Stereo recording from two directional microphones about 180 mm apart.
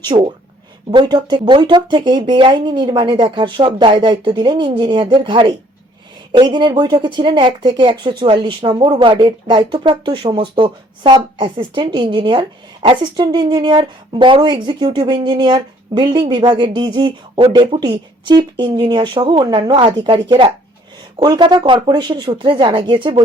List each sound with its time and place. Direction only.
0.0 s speech: 25° right (ahead or behind)